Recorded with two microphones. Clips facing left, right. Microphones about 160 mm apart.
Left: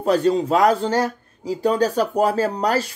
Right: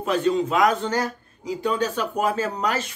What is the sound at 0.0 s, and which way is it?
A man's voice, 35° left (ahead or behind).